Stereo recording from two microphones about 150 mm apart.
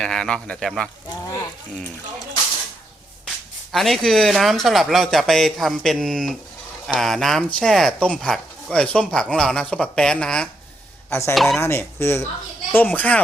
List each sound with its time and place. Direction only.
0.0 s speech: 5° left (ahead or behind)
3.7 s speech: centre (ahead or behind)
11.1 s speech: 15° left (ahead or behind)
11.3 s speech: centre (ahead or behind)
11.6 s speech: 15° left (ahead or behind)